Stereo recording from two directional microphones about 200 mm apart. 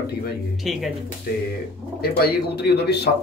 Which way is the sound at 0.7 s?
Centre (ahead or behind).